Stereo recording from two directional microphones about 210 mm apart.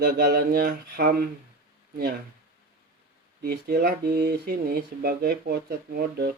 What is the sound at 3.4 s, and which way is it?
Speech, 50° right (ahead or behind).